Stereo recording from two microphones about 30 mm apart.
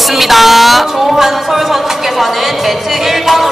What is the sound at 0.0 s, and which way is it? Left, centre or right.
Music, centre.